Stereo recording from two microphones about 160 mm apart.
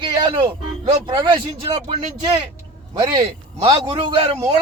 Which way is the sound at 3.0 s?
30° right (ahead or behind).